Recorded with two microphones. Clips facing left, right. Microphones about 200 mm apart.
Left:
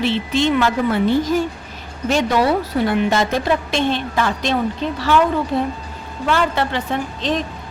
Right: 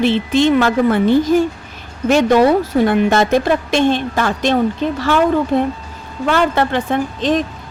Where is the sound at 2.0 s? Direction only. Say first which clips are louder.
Right 6 dB; 50° right (ahead or behind).